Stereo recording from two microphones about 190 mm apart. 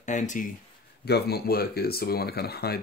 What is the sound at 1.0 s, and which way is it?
Speech, 60° left (ahead or behind).